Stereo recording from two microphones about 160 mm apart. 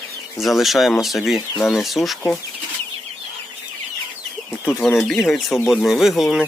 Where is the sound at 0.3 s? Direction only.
Centre (ahead or behind).